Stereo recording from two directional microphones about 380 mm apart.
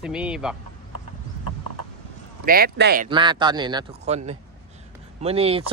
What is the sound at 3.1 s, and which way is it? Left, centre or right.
Speech, centre.